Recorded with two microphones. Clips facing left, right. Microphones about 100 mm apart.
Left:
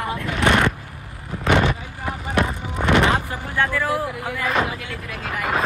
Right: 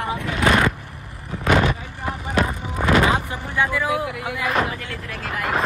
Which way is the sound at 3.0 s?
15° right (ahead or behind).